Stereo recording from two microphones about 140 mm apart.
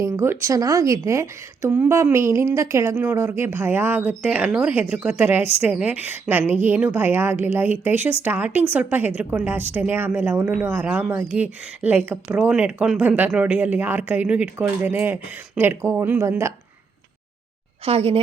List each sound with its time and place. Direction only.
0.0 s speech: 20° right (ahead or behind)
17.8 s a woman's voice: 45° right (ahead or behind)